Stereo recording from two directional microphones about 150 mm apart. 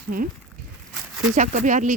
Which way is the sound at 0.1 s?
75° right (ahead or behind).